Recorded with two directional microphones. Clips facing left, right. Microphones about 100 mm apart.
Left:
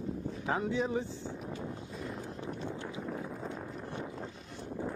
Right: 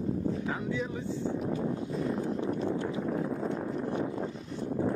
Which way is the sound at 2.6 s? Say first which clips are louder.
Right 8 dB; 80° right.